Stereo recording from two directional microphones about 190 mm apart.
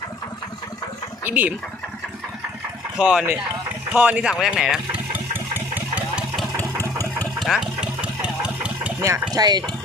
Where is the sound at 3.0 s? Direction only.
5° right (ahead or behind).